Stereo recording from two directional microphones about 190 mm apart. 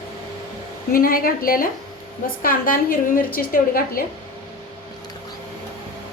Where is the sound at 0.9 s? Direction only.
50° left (ahead or behind).